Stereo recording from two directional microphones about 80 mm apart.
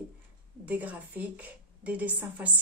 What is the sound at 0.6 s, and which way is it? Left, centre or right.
A woman's voice, centre.